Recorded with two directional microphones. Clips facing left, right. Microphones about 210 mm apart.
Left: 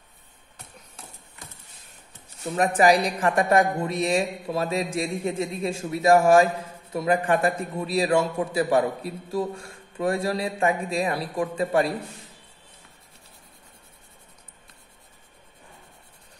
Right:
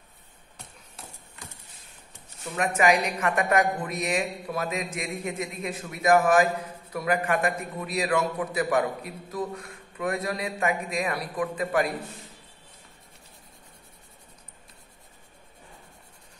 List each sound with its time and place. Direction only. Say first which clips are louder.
2.5 s a woman's voice: left 4 dB; 35° left (ahead or behind)